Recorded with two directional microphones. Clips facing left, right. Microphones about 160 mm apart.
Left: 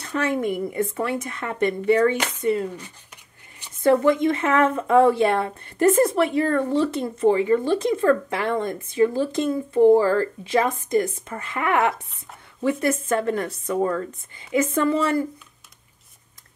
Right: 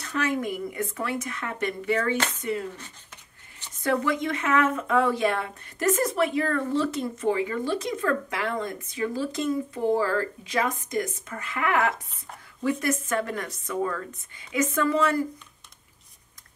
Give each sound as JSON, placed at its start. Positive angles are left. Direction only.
{"t": 0.0, "sound": "speech", "side_deg": 30}
{"t": 3.8, "sound": "speech", "side_deg": 25}
{"t": 13.1, "sound": "speech", "side_deg": 30}